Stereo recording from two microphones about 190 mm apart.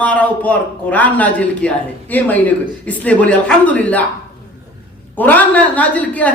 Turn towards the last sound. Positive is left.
turn(degrees=10)  # may be behind; listen again after turning